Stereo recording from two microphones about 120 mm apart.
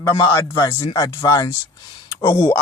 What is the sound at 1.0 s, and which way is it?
Speech, 25° left (ahead or behind).